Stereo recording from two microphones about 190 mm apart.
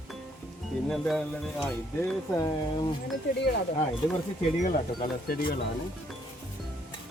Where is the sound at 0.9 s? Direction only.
Centre (ahead or behind).